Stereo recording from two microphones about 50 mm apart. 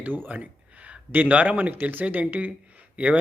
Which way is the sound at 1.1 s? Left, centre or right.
Right.